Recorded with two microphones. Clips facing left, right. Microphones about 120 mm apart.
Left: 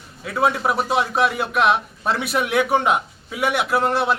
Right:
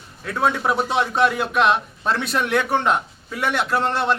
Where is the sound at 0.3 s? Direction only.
5° left (ahead or behind).